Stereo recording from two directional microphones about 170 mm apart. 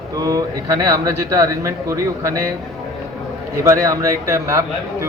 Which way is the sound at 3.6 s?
20° right (ahead or behind).